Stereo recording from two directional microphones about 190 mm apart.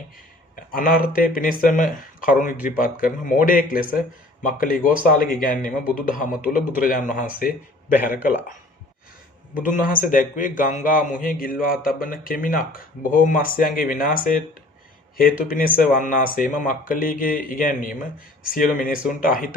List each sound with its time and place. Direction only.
0.5 s a man's voice: 45° left (ahead or behind)
9.6 s speech: 45° left (ahead or behind)